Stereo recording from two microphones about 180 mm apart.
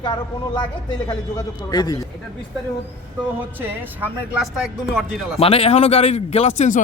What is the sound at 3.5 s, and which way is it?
Speech, 10° right (ahead or behind).